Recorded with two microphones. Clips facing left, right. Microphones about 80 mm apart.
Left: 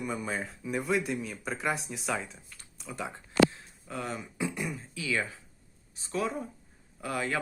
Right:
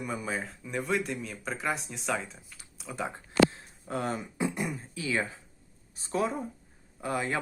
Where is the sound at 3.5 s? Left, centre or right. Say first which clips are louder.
Right 4 dB; right.